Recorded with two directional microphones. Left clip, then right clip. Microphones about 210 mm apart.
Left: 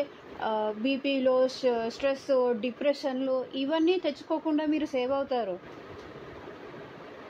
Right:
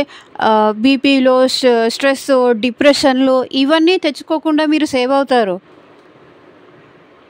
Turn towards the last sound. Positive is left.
turn(degrees=-60)  # may be behind; listen again after turning